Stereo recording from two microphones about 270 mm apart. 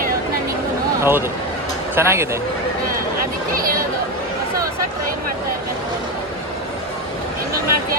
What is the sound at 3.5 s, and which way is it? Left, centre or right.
Chatter, right.